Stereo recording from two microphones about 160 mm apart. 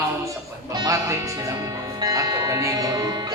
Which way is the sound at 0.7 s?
25° right (ahead or behind).